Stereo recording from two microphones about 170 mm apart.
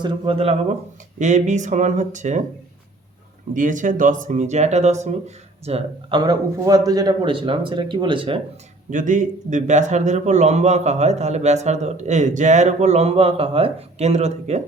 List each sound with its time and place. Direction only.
0.0 s a man's voice: 30° right (ahead or behind); by 2.4 s 45° right (ahead or behind)
3.5 s a man's voice: 50° right (ahead or behind); by 8.4 s 30° right (ahead or behind)
8.9 s a man's voice: 50° right (ahead or behind)